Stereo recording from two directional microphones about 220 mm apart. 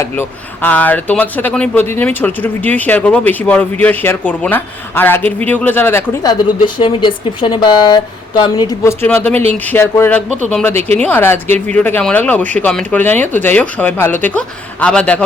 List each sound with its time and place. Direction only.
0.0 s speech: 10° left (ahead or behind)
6.7 s a woman's voice: 20° left (ahead or behind)
10.8 s speech: 30° right (ahead or behind)
11.0 s speech: 10° left (ahead or behind)